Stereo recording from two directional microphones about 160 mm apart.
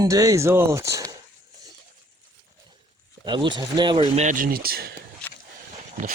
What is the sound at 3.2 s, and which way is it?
Speech, 30° right (ahead or behind).